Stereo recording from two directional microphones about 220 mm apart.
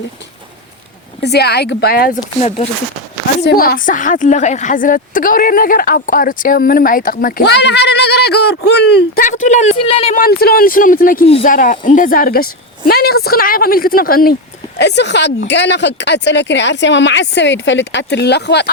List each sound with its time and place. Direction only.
1.2 s speech: 50° left (ahead or behind)
3.4 s a woman's voice: 40° left (ahead or behind); by 10.2 s 25° left (ahead or behind)
10.2 s a woman's voice: 40° left (ahead or behind)